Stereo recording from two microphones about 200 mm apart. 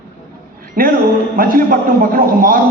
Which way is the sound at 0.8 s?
45° right (ahead or behind).